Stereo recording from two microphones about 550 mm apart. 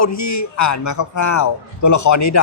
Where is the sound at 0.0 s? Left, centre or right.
Left.